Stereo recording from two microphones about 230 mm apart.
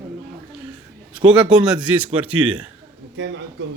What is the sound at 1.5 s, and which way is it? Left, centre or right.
A man's voice, centre.